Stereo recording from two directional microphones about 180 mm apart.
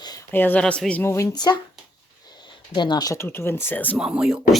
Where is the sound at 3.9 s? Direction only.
5° right (ahead or behind).